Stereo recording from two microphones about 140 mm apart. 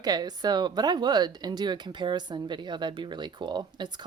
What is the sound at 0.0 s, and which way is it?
Speech, 30° right (ahead or behind).